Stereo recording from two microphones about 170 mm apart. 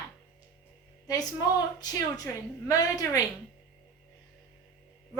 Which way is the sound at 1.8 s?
20° left (ahead or behind).